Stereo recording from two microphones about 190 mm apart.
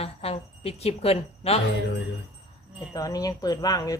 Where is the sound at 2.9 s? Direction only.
20° left (ahead or behind).